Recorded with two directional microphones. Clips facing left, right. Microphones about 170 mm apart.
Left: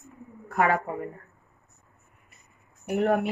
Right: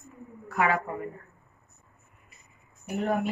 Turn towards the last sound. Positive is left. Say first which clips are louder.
# left 4 dB
turn(degrees=65)  # may be behind; listen again after turning